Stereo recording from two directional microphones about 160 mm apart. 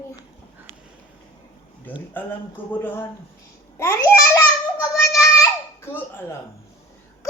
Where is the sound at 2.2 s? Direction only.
10° left (ahead or behind).